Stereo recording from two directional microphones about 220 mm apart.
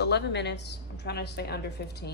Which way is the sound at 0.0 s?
50° left (ahead or behind).